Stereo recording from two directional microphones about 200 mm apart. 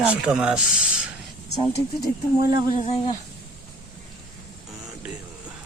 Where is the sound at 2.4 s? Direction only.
20° right (ahead or behind).